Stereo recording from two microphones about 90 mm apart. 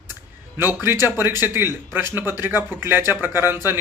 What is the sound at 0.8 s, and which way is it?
A man's voice, 25° right (ahead or behind).